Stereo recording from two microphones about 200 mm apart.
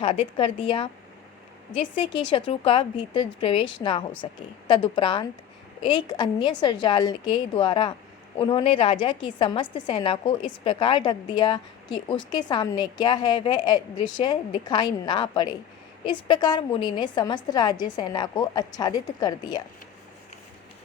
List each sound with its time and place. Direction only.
0.0 s a woman's voice: 25° left (ahead or behind)